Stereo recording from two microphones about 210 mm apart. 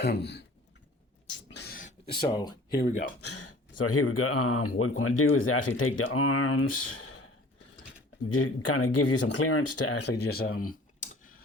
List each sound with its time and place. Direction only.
0.0 s speech: 50° left (ahead or behind)
1.5 s a sound: 50° left (ahead or behind)
2.1 s speech: 20° left (ahead or behind)
3.2 s speech: 90° left
8.4 s speech: 90° left
10.0 s a sound: 55° left (ahead or behind)